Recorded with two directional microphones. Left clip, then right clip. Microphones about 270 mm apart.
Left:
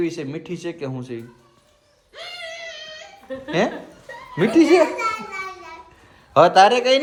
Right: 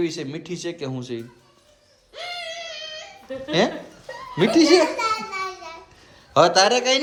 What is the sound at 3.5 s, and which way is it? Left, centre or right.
A man's voice, centre.